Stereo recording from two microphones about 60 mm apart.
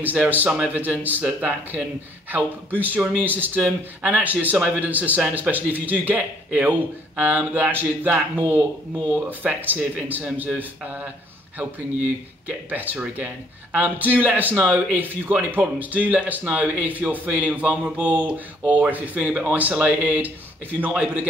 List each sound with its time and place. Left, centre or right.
0.0 s a man's voice: right